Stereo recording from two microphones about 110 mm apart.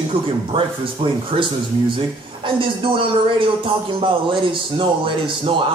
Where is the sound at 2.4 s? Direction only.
50° right (ahead or behind).